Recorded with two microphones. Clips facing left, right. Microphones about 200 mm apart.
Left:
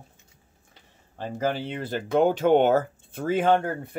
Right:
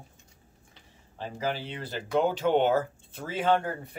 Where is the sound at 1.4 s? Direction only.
50° left (ahead or behind).